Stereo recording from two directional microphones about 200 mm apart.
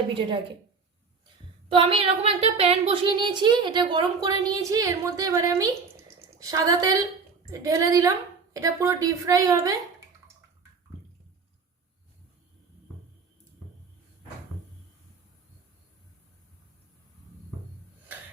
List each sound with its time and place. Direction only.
1.7 s a woman's voice: 25° right (ahead or behind)